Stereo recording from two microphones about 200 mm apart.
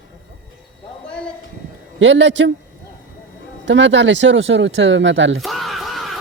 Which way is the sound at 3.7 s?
65° right (ahead or behind).